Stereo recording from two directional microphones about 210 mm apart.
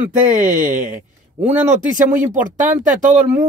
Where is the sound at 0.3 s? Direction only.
40° right (ahead or behind).